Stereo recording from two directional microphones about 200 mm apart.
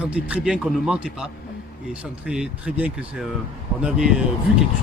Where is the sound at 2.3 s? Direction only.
5° right (ahead or behind).